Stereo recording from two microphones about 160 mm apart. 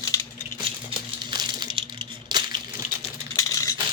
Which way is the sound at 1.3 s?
30° right (ahead or behind).